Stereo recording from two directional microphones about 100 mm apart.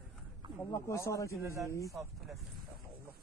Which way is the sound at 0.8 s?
30° left (ahead or behind).